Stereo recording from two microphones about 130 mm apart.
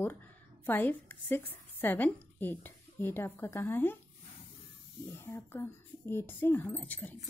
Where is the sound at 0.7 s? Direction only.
15° left (ahead or behind).